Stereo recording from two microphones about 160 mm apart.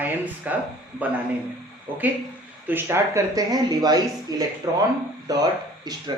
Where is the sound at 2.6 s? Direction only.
15° right (ahead or behind).